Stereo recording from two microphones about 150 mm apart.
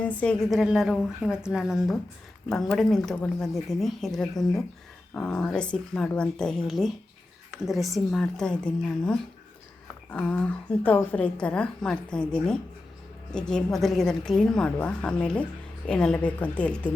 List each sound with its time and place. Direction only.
0.0 s a woman's voice: 10° left (ahead or behind)